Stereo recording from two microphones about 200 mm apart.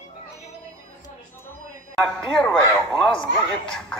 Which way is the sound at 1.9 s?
5° left (ahead or behind).